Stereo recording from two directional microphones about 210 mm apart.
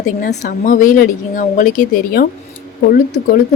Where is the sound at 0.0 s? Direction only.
35° left (ahead or behind).